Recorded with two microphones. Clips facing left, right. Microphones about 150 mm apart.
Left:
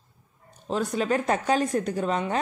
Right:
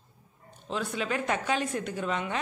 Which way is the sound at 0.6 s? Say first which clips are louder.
Left 6 dB; 40° left (ahead or behind).